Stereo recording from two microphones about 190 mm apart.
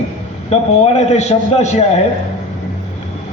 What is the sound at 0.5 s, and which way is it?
A man's voice, 35° left (ahead or behind).